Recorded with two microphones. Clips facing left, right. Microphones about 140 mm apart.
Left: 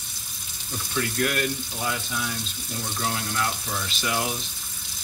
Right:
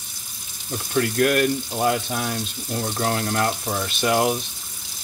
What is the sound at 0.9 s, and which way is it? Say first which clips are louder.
Speech: right 7 dB; 50° right (ahead or behind).